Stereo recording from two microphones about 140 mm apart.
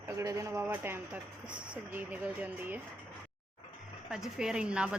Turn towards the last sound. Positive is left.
turn(degrees=-5)  # may be behind; listen again after turning